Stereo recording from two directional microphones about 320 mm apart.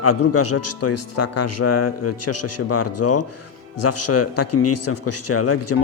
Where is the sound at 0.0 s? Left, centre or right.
Left.